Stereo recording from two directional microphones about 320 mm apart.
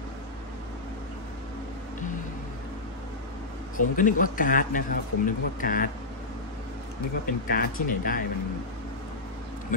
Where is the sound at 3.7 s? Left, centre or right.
Left.